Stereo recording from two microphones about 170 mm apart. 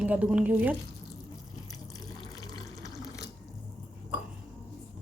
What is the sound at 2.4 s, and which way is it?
Water, 20° left (ahead or behind).